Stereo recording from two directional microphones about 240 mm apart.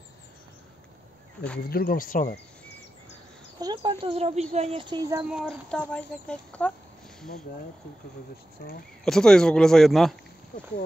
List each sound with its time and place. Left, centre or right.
1.7 s speech: left
3.5 s speech: centre
5.3 s speech: centre
8.6 s speech: left
9.0 s speech: centre